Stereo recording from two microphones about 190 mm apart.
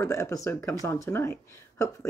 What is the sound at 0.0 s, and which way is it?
Speech, 15° left (ahead or behind).